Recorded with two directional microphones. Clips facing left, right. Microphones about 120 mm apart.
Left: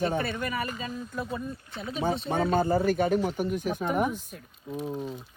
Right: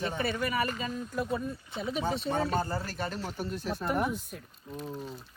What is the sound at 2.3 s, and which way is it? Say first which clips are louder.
Speech: left 5 dB; 55° left (ahead or behind).